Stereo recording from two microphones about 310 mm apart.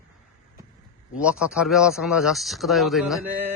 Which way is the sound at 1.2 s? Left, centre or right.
Centre.